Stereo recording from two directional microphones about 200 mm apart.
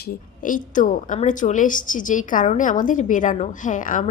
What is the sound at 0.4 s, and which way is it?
A woman's voice, 40° left (ahead or behind).